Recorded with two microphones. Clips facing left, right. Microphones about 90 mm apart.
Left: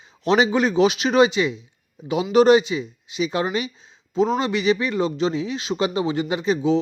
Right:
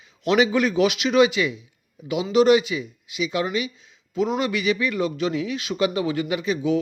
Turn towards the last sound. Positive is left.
turn(degrees=30)  # may be behind; listen again after turning